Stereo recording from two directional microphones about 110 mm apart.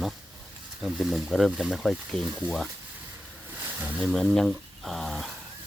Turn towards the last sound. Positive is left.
turn(degrees=0)  # may be behind; listen again after turning